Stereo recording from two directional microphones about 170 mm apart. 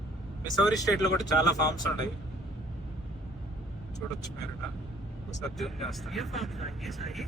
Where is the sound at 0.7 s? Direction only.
20° left (ahead or behind).